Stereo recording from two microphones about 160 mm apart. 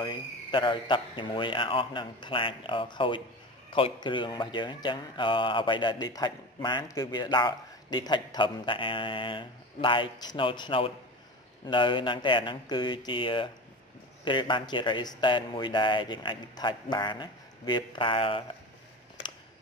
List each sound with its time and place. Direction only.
0.0 s a man's voice: 30° left (ahead or behind)